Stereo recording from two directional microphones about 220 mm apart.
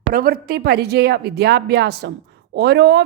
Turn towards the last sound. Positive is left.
turn(degrees=-50)  # may be behind; listen again after turning